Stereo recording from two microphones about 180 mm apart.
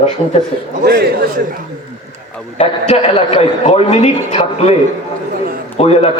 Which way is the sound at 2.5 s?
35° left (ahead or behind).